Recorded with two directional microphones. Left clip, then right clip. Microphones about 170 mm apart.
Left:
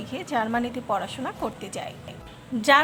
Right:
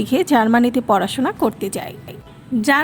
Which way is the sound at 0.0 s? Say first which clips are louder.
Right 11 dB; 45° right (ahead or behind).